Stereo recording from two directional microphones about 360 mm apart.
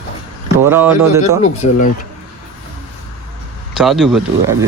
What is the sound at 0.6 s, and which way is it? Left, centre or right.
Speech, centre.